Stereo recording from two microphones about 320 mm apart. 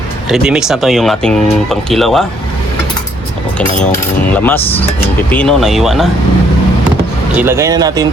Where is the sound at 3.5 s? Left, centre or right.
Centre.